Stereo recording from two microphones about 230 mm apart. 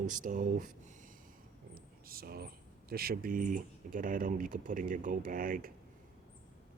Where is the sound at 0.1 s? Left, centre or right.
Right.